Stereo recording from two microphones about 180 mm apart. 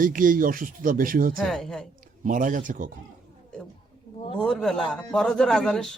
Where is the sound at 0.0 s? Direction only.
50° right (ahead or behind).